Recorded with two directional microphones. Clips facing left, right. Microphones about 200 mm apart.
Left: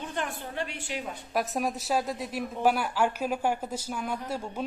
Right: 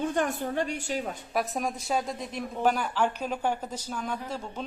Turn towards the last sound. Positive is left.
turn(degrees=10)  # may be behind; listen again after turning